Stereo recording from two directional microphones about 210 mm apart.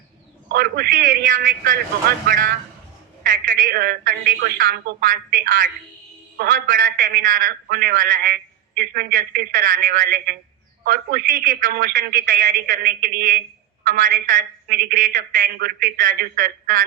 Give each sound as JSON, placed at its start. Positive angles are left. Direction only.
{"t": 0.4, "sound": "a man's voice", "side_deg": -45}
{"t": 3.2, "sound": "a man's voice", "side_deg": -40}